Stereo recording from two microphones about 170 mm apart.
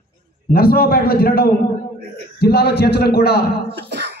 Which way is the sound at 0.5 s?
60° left (ahead or behind).